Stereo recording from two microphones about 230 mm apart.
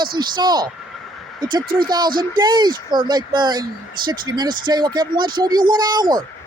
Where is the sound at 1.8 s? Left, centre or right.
Centre.